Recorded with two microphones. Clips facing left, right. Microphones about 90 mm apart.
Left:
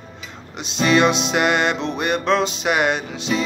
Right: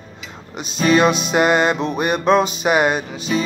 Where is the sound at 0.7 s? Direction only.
5° right (ahead or behind).